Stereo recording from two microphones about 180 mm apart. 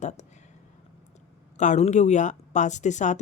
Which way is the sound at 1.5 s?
40° left (ahead or behind).